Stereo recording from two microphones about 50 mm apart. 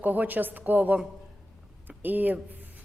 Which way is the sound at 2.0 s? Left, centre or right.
Right.